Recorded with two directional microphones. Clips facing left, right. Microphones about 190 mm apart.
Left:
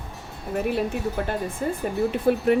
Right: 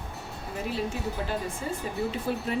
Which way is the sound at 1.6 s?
55° left (ahead or behind).